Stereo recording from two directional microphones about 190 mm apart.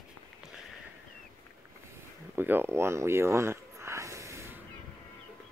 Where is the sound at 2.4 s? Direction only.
10° right (ahead or behind).